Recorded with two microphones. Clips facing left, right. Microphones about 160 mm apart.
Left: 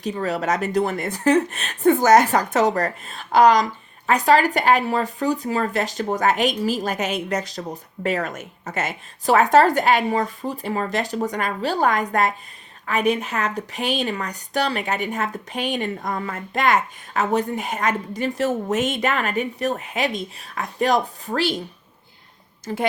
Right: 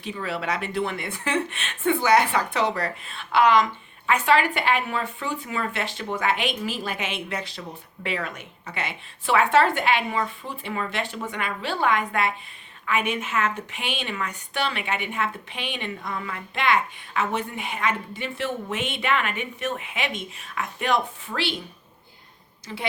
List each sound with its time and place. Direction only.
0.0 s speech: 40° left (ahead or behind)
22.6 s a woman's voice: 45° left (ahead or behind)